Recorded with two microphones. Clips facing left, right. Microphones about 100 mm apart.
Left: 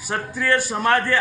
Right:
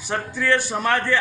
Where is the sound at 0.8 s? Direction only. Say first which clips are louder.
Left 3 dB; 15° left (ahead or behind).